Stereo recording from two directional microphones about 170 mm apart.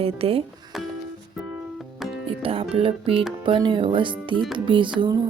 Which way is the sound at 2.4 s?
35° right (ahead or behind).